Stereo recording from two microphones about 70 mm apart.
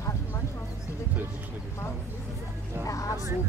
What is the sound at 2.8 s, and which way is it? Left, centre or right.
Speech, left.